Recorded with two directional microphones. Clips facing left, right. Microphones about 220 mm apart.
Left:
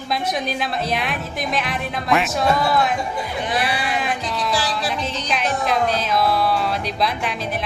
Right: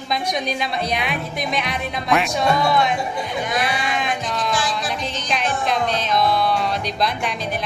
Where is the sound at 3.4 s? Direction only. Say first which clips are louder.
Left 1 dB; 30° left (ahead or behind).